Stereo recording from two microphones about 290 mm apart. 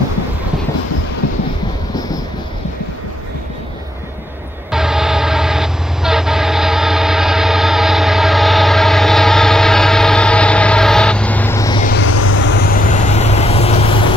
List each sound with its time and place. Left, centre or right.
4.6 s train: centre
11.8 s vehicle: left
12.1 s vehicle: left